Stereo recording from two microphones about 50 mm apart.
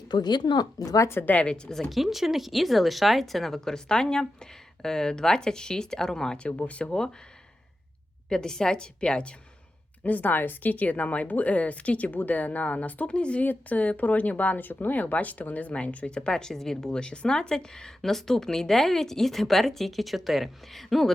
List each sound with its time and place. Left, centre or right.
0.8 s speech: left
1.2 s a woman's voice: left
1.5 s speech: left
1.9 s speech: centre
6.6 s speech: left
8.3 s speech: centre
10.0 s a woman's voice: left
13.1 s speech: left
13.4 s speech: left; by 21.1 s centre